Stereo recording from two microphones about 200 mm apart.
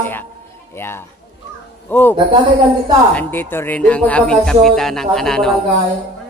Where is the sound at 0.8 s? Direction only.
10° left (ahead or behind).